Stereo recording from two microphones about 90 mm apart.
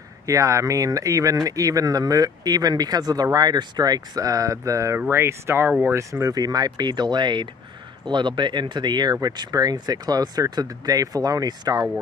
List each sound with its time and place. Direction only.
0.3 s speech: 35° right (ahead or behind)
5.7 s speech: 20° right (ahead or behind)
5.9 s speech: 35° right (ahead or behind)